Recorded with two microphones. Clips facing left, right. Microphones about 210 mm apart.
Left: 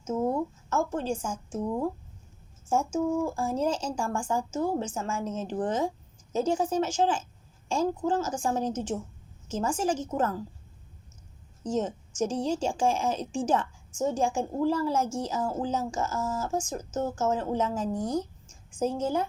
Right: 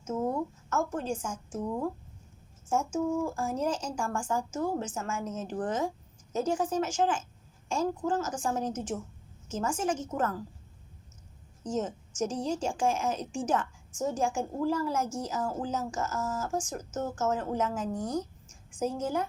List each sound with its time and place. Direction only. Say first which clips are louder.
0.7 s a woman's voice: left 2 dB; 30° left (ahead or behind)
2.6 s a woman's voice: left 2 dB; 30° left (ahead or behind)
11.6 s a woman's voice: left 3 dB; 30° left (ahead or behind)